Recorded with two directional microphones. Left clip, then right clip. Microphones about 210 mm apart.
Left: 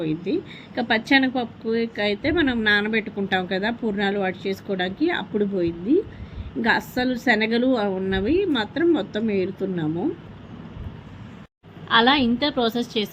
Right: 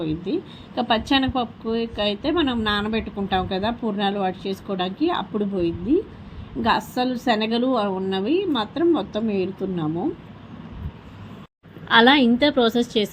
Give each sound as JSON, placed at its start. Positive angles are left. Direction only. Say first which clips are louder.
{"t": 0.0, "sound": "a woman's voice", "louder": "left 1 dB", "side_deg": 0}
{"t": 11.9, "sound": "a woman's voice", "louder": "right 3 dB", "side_deg": -15}